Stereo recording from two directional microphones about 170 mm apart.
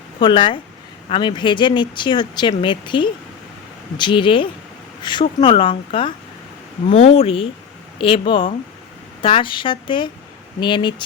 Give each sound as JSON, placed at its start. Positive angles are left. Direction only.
{"t": 0.2, "sound": "speech", "side_deg": 30}